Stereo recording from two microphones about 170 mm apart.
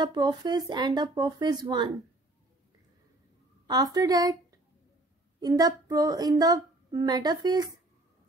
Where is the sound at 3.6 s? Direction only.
25° right (ahead or behind).